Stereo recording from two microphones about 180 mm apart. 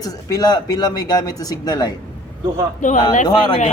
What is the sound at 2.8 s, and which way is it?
Speech, 45° left (ahead or behind).